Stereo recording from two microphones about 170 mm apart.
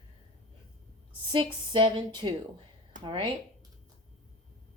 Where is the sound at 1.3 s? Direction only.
30° right (ahead or behind).